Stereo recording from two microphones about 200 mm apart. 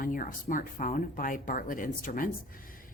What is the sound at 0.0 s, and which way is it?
Speech, 45° left (ahead or behind).